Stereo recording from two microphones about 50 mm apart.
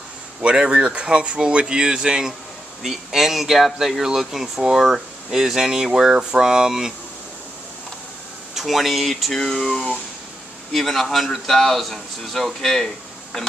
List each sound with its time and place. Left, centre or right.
0.4 s speech: right
8.5 s a man's voice: centre